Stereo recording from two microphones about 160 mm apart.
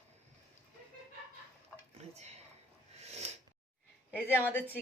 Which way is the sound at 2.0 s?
40° right (ahead or behind).